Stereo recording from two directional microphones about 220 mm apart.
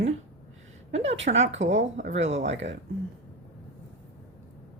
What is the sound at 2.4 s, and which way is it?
Speech, 30° right (ahead or behind).